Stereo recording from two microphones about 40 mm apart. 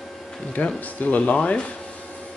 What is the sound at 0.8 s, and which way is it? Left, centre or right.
Speech, left.